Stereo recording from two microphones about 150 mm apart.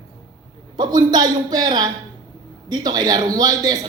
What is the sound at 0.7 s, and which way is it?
A man's voice, 25° right (ahead or behind).